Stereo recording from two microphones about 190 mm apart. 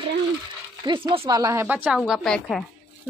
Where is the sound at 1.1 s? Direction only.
30° right (ahead or behind).